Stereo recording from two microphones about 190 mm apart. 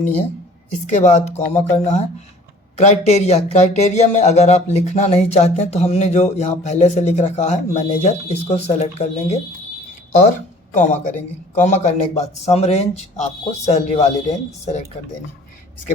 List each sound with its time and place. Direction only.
0.9 s a man's voice: 40° left (ahead or behind)
10.8 s a man's voice: 40° left (ahead or behind)